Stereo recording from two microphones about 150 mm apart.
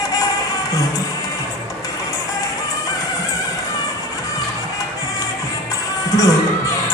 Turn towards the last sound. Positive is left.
turn(degrees=20)  # may be behind; listen again after turning